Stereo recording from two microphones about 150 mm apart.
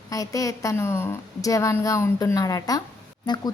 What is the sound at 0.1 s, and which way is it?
A woman's voice, 25° left (ahead or behind).